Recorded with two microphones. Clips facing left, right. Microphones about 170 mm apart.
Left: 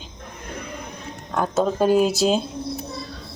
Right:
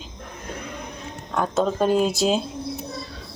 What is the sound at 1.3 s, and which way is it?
Speech, 5° left (ahead or behind).